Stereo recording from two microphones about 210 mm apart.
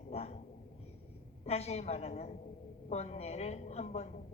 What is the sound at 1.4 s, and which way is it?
A woman's voice, 30° left (ahead or behind).